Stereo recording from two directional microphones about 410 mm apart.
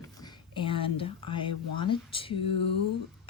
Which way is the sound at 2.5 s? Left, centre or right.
Left.